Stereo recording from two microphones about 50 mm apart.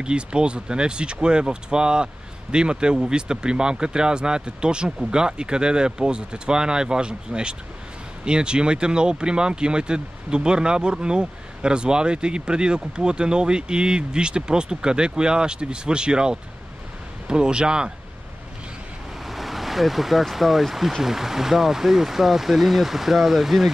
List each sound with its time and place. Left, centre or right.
0.0 s speech: centre
19.2 s speech: centre